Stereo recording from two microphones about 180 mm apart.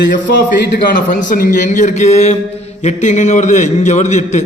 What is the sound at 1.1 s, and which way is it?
A man's voice, 50° left (ahead or behind).